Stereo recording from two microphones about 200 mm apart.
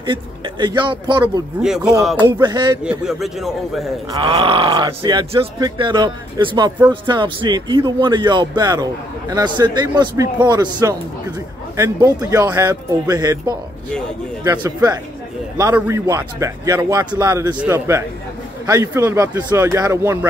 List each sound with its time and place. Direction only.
0.0 s a man's voice: 20° right (ahead or behind)
1.6 s a man's voice: 5° right (ahead or behind)
2.1 s speech: 20° right (ahead or behind)
2.8 s a man's voice: 5° right (ahead or behind)
4.1 s a man's voice: 25° right (ahead or behind)